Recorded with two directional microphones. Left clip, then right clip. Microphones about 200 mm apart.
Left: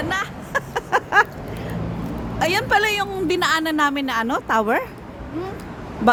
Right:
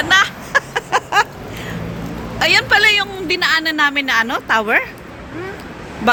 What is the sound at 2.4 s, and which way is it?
A woman's voice, 25° left (ahead or behind).